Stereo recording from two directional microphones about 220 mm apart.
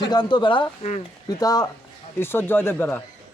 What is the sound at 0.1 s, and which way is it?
Speech, 20° left (ahead or behind).